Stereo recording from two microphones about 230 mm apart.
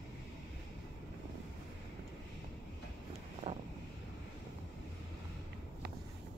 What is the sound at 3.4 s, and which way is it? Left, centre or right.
Vehicle, right.